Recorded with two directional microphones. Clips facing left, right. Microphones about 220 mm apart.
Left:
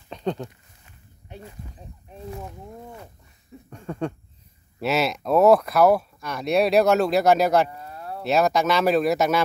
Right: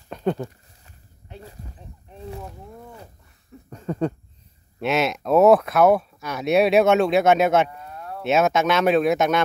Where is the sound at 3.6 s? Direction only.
5° right (ahead or behind).